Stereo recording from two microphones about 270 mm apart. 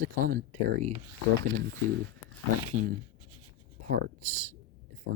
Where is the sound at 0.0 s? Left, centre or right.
Right.